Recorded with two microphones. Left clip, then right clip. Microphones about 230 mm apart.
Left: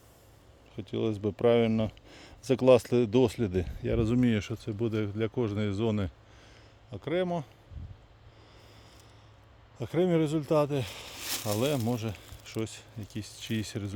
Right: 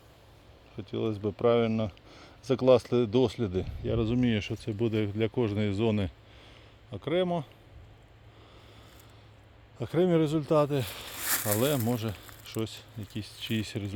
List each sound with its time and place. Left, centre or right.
0.8 s speech: left; by 7.4 s centre
9.7 s speech: centre
11.3 s a sound: centre
11.6 s speech: centre